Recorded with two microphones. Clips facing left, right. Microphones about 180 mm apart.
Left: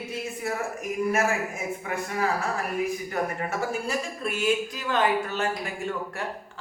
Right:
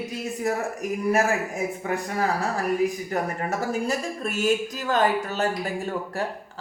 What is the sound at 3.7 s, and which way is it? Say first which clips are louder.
Speech: right 3 dB; 40° right (ahead or behind).